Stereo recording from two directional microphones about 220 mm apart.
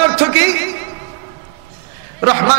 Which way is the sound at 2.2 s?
15° right (ahead or behind).